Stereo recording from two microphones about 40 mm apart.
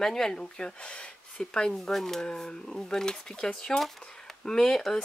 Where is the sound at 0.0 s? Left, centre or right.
Centre.